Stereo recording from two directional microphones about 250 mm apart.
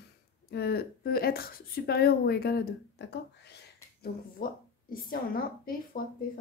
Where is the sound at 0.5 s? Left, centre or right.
Left.